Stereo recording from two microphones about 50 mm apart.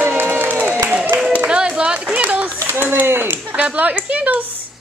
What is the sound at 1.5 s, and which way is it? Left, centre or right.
Clapping, centre.